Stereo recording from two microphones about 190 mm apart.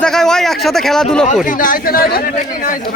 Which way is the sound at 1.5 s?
45° left (ahead or behind).